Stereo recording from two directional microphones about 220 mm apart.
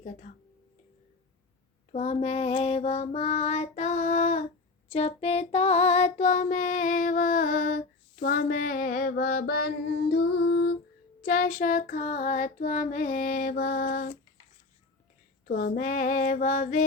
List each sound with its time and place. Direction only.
0.0 s child singing: 35° left (ahead or behind)
1.9 s child singing: 30° left (ahead or behind)
15.4 s child singing: 40° left (ahead or behind)